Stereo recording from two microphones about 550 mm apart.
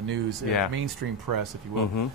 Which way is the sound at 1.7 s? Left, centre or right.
Left.